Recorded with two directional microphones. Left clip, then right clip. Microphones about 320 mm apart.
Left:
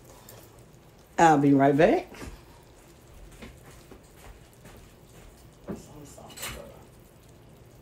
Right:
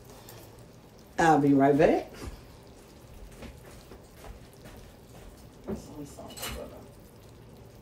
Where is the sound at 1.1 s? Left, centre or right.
Left.